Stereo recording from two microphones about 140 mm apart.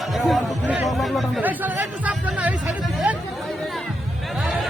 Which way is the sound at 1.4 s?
15° right (ahead or behind).